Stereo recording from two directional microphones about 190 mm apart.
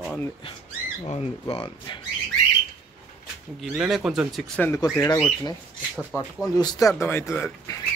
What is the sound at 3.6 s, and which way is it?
Speech, 5° right (ahead or behind).